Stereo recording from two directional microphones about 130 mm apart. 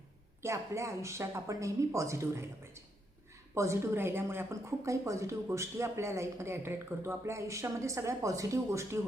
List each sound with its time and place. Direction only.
0.4 s a woman's voice: 20° right (ahead or behind)